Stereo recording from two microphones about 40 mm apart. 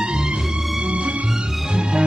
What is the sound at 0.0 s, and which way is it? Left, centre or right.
Music, right.